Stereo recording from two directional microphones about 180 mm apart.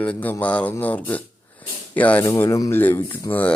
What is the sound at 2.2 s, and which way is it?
Speech, 20° left (ahead or behind).